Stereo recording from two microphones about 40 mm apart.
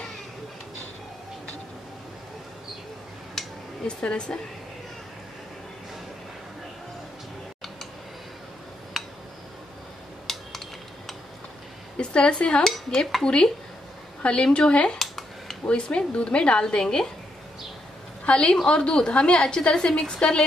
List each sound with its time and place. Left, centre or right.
3.4 s a sound: centre
3.8 s a woman's voice: left
9.0 s tick-tock: centre
10.3 s computer keyboard: centre
12.0 s a woman's voice: left
15.0 s a sound: centre
15.6 s a woman's voice: left
18.3 s a woman's voice: left